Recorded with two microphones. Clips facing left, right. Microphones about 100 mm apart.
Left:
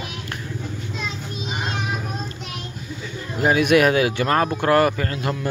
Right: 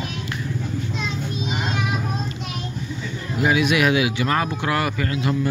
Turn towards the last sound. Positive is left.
turn(degrees=45)  # may be behind; listen again after turning